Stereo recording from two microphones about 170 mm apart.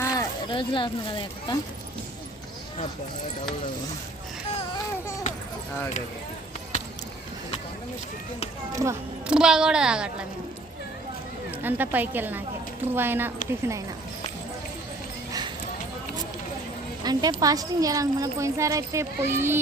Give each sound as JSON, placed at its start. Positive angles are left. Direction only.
{"t": 0.0, "sound": "speech", "side_deg": 20}
{"t": 8.7, "sound": "a woman's voice", "side_deg": -20}
{"t": 9.2, "sound": "a woman's voice", "side_deg": -5}
{"t": 11.6, "sound": "a woman's voice", "side_deg": -10}
{"t": 17.0, "sound": "a woman's voice", "side_deg": -25}